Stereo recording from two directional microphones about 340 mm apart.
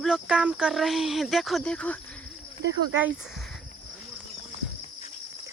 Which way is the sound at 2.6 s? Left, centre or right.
Right.